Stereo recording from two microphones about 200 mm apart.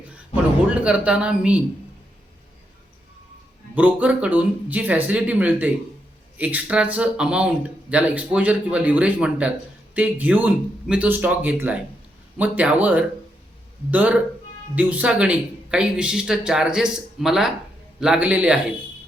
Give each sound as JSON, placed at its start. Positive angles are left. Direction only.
{"t": 0.8, "sound": "speech", "side_deg": -5}
{"t": 3.8, "sound": "speech", "side_deg": -10}